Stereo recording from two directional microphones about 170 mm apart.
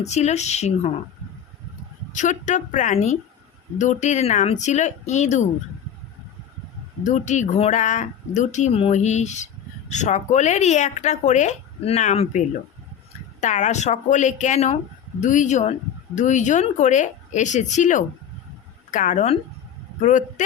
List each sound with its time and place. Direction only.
0.0 s speech: 40° left (ahead or behind)
2.1 s speech: 45° left (ahead or behind)
7.0 s speech: 45° left (ahead or behind)
13.4 s speech: 45° left (ahead or behind)